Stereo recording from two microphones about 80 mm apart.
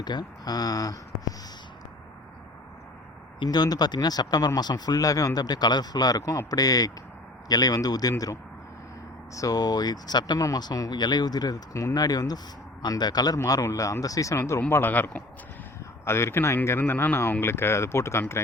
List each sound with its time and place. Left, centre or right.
0.0 s speech: left
3.4 s a man's voice: left
9.3 s speech: left
13.5 s speech: left
14.7 s speech: left
16.0 s speech: left